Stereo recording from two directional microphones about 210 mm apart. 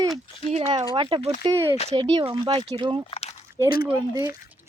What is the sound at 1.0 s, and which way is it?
Speech, 20° right (ahead or behind).